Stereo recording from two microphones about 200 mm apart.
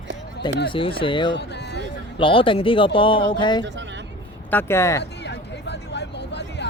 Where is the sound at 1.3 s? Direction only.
60° left (ahead or behind).